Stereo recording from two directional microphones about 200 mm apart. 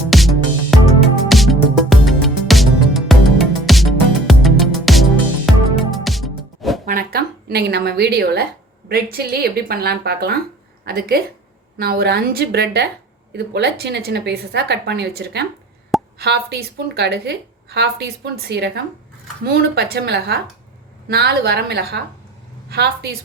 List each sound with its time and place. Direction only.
0.1 s music: centre (ahead or behind)
6.8 s a sound: 50° right (ahead or behind)
8.9 s a woman's voice: 50° right (ahead or behind)